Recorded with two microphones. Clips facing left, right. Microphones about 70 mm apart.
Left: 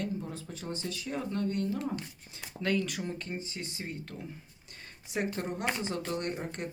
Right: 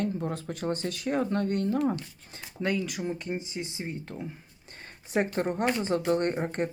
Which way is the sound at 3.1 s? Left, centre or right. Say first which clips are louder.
Right 5 dB; centre.